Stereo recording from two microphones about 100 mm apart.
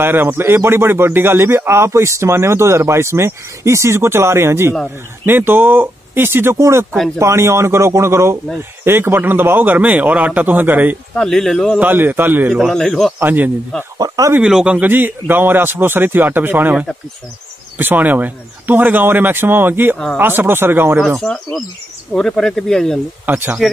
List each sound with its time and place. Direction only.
0.0 s a man's voice: 20° right (ahead or behind)
11.1 s speech: 5° left (ahead or behind)
11.8 s a man's voice: 20° right (ahead or behind)
12.5 s speech: centre (ahead or behind)
13.2 s a man's voice: 20° right (ahead or behind)
13.9 s speech: 35° right (ahead or behind)
14.4 s a man's voice: 10° right (ahead or behind)
21.2 s speech: 5° left (ahead or behind)
23.2 s a man's voice: 20° right (ahead or behind)